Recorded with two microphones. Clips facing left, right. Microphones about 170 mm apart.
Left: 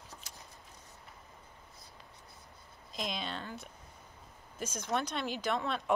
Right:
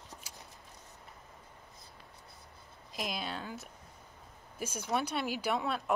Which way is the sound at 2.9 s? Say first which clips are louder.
Even; 5° right (ahead or behind).